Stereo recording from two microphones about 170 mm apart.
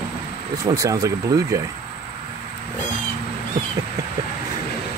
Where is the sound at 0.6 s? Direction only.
20° right (ahead or behind).